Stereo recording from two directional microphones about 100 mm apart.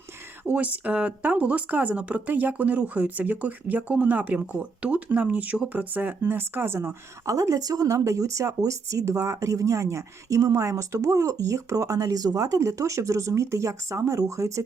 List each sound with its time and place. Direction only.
0.4 s speech: 15° right (ahead or behind)
7.3 s speech: 35° right (ahead or behind)